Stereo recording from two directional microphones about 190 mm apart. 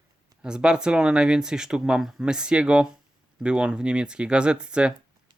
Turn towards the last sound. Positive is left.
turn(degrees=-5)  # may be behind; listen again after turning